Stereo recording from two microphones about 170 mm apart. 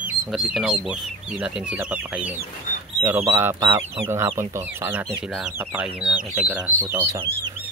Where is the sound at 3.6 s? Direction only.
30° right (ahead or behind).